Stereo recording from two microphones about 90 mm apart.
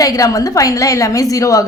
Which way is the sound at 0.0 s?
40° left (ahead or behind).